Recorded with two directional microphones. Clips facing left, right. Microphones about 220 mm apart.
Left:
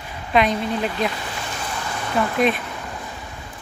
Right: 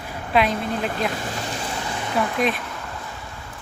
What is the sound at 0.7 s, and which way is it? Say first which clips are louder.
Speech: left 1 dB; 50° right (ahead or behind).